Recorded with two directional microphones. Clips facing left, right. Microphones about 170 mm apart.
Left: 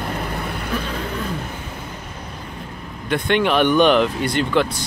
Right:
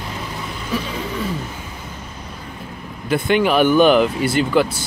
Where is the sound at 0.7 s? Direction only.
5° right (ahead or behind).